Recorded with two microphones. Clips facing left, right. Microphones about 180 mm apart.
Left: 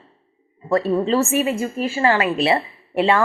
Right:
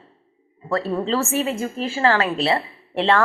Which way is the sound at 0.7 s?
15° left (ahead or behind).